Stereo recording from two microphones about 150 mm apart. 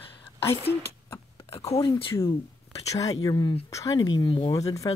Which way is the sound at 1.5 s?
45° left (ahead or behind).